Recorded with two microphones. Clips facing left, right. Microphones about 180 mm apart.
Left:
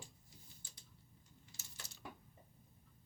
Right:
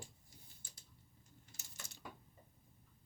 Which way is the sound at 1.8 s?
50° right (ahead or behind).